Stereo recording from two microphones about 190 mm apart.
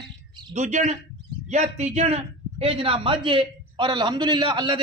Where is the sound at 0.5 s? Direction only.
40° right (ahead or behind).